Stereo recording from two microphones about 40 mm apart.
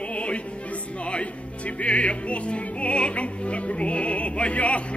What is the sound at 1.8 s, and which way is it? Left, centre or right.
Opera, left.